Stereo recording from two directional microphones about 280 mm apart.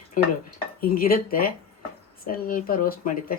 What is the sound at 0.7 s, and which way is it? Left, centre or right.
Speech, left.